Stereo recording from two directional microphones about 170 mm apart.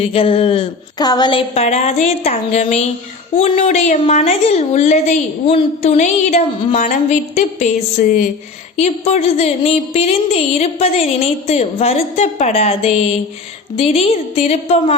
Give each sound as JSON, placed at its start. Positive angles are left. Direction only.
{"t": 0.0, "sound": "a woman's voice", "side_deg": 35}
{"t": 8.7, "sound": "a woman's voice", "side_deg": 40}